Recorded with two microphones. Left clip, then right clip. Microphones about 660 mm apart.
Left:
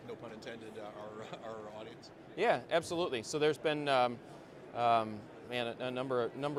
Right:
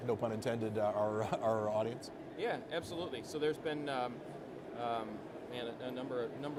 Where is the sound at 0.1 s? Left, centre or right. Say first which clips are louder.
Right 10 dB; right.